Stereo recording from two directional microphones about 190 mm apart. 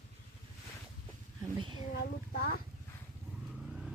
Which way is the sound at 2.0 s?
50° left (ahead or behind).